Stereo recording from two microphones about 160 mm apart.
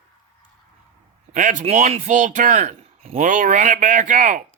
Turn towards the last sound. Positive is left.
turn(degrees=-50)  # may be behind; listen again after turning